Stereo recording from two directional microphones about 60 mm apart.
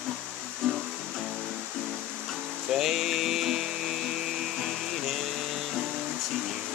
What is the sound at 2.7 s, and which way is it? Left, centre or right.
Music, centre.